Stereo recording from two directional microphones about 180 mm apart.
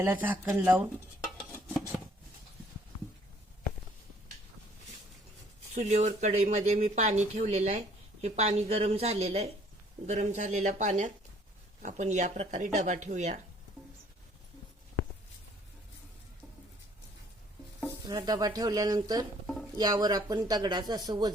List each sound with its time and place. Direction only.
0.0 s speech: 10° right (ahead or behind)
5.7 s speech: 40° right (ahead or behind)
18.0 s speech: 20° right (ahead or behind)